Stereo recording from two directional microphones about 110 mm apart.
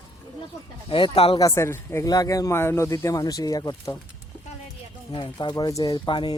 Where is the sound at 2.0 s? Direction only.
35° left (ahead or behind).